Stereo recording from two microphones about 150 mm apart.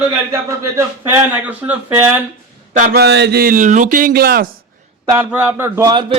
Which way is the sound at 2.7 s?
75° right (ahead or behind).